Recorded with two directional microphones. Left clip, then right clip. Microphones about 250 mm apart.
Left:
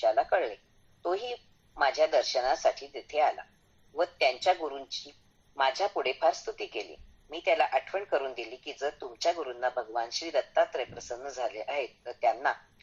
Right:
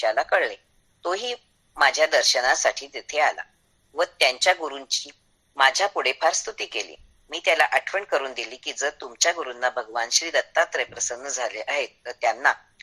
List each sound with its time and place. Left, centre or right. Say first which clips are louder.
0.0 s speech: right 5 dB; right
2.6 s speech: right 5 dB; right